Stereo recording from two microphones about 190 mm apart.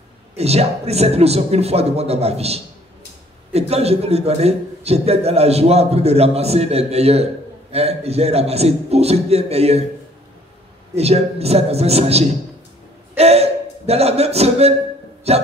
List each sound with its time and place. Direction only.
0.4 s a man's voice: 35° right (ahead or behind)
11.0 s a man's voice: 35° right (ahead or behind)
13.1 s a sound: 35° right (ahead or behind)
15.3 s a man's voice: 35° right (ahead or behind)